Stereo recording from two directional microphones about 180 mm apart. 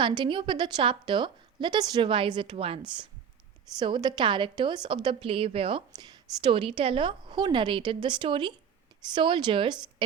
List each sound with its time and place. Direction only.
0.0 s a woman's voice: 25° right (ahead or behind)